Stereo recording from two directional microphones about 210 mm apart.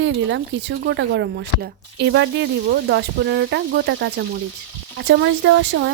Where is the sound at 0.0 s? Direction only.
60° right (ahead or behind).